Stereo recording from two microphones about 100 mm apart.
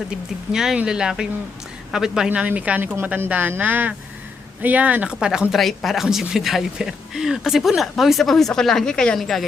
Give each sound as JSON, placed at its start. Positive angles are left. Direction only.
{"t": 0.5, "sound": "speech", "side_deg": -5}